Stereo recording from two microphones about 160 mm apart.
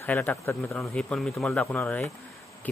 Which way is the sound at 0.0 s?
10° left (ahead or behind).